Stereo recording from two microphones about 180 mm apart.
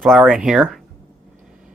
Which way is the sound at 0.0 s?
5° right (ahead or behind).